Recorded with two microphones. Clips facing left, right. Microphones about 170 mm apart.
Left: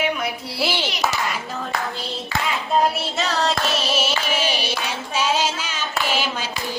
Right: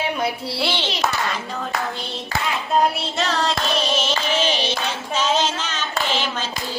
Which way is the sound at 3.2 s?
Centre (ahead or behind).